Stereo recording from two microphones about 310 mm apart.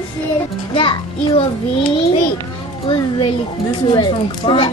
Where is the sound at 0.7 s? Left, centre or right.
Centre.